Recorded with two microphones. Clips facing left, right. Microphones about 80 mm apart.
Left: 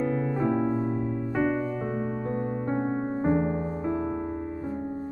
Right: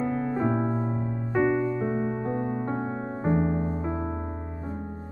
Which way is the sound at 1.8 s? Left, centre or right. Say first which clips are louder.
Right 2 dB; right.